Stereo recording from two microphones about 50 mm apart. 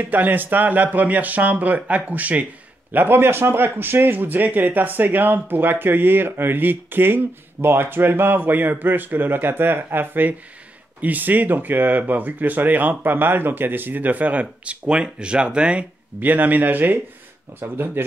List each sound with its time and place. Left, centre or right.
0.0 s speech: right
2.9 s speech: right
16.2 s speech: right
17.6 s speech: right